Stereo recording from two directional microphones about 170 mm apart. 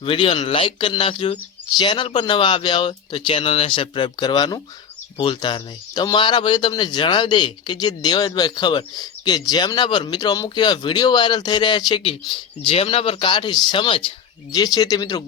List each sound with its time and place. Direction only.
0.0 s speech: 30° left (ahead or behind)